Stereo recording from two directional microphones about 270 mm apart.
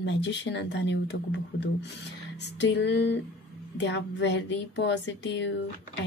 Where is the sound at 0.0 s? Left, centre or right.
Left.